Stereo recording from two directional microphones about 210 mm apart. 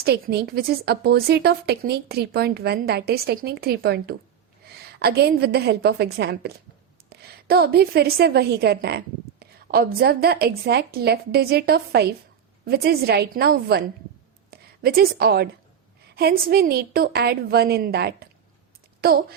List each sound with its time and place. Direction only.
0.0 s a woman's voice: 50° right (ahead or behind)